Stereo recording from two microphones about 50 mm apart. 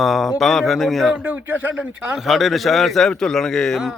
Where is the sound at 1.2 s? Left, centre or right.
Right.